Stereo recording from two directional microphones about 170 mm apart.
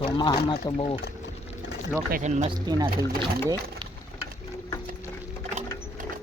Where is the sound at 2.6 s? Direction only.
25° right (ahead or behind).